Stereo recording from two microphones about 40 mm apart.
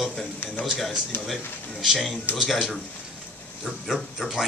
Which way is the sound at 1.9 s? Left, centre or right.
Centre.